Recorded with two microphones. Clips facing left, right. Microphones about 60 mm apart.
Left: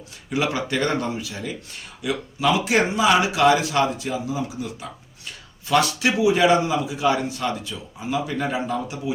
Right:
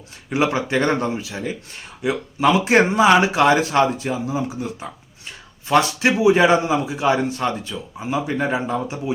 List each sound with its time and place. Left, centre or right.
0.3 s speech: right